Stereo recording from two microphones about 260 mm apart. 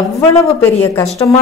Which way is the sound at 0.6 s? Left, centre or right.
Centre.